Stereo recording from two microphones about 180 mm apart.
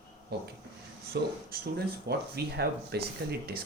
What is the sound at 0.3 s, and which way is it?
Speech, 65° right (ahead or behind).